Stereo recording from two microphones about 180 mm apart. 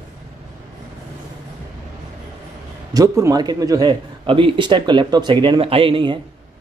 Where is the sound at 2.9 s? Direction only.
20° right (ahead or behind).